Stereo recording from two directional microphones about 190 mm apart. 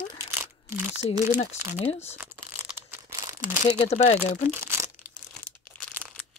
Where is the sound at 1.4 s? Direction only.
30° left (ahead or behind).